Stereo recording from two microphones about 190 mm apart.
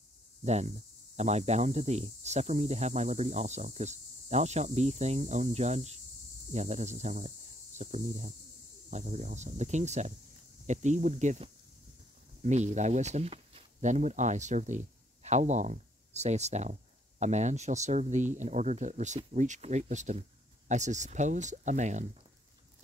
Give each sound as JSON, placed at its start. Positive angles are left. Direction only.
{"t": 0.4, "sound": "speech", "side_deg": -35}